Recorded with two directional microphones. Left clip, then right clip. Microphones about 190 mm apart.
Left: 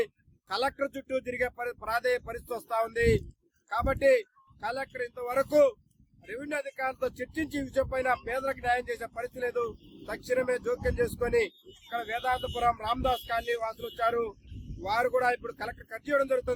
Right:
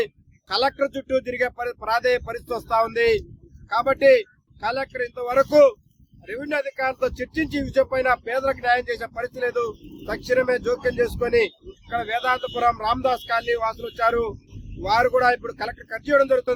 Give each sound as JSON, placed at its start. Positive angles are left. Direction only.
{"t": 0.0, "sound": "speech", "side_deg": 0}